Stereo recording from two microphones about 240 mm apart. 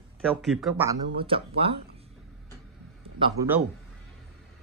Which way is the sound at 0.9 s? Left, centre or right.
Right.